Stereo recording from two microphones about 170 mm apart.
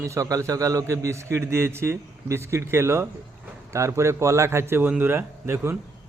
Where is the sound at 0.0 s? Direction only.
20° right (ahead or behind).